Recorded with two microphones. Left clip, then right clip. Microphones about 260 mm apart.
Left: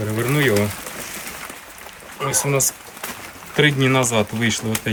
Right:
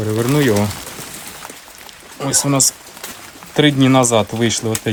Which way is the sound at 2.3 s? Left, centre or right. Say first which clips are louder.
Right 4 dB; centre.